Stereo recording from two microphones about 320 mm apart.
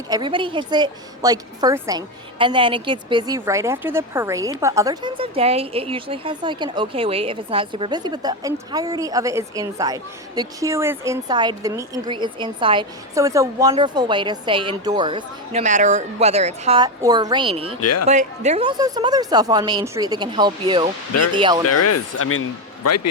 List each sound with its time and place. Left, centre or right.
0.1 s a woman's voice: centre
17.7 s speech: left
18.1 s a woman's voice: right
21.6 s speech: left